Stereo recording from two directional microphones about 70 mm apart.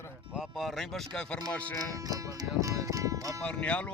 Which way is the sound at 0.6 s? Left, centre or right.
Centre.